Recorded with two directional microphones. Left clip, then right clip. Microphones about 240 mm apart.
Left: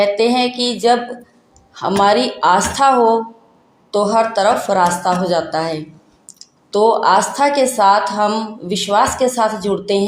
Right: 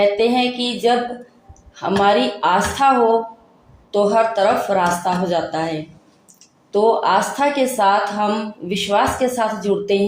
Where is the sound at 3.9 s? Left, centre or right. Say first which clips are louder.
Left 1 dB; left.